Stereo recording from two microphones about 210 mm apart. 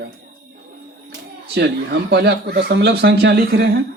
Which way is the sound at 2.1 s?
50° right (ahead or behind).